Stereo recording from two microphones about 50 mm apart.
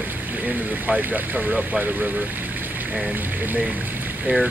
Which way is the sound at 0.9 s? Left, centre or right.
Right.